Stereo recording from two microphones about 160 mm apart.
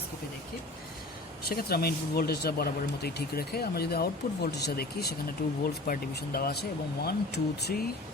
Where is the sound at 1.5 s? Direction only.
70° left (ahead or behind).